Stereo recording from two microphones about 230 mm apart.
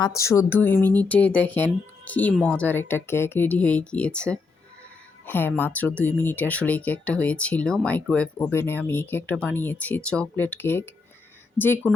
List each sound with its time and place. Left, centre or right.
0.0 s speech: centre